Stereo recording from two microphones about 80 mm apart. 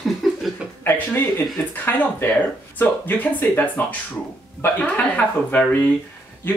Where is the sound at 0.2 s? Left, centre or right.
Centre.